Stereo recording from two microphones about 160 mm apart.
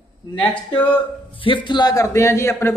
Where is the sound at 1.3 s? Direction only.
30° left (ahead or behind); by 2.7 s 15° left (ahead or behind).